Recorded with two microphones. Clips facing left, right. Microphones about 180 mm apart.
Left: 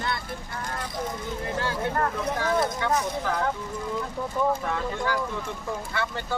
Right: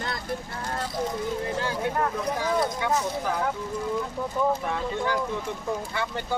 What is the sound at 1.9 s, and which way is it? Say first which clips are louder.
Speech: even; 10° right (ahead or behind).